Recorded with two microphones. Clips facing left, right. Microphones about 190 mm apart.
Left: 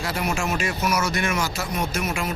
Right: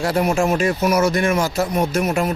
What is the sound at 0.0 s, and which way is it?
Speech, 40° right (ahead or behind).